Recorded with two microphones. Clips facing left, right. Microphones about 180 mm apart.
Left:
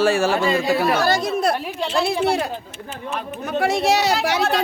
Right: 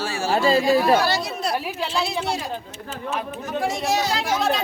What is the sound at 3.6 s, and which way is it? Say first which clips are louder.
Speech: left 5 dB; 70° left (ahead or behind).